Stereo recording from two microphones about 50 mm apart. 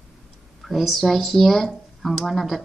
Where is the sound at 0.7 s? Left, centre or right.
Centre.